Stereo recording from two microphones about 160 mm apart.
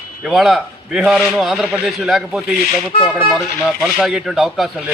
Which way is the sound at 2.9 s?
40° left (ahead or behind).